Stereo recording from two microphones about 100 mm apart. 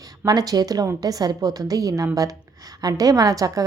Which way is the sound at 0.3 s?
40° right (ahead or behind).